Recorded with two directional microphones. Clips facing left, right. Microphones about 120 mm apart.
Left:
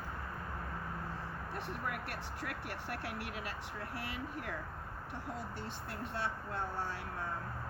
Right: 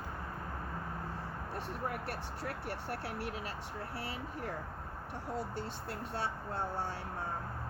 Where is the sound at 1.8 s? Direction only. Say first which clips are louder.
Right 2 dB; 30° right (ahead or behind).